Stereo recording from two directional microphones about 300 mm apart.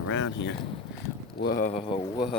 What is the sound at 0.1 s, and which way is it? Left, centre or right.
Speech, left.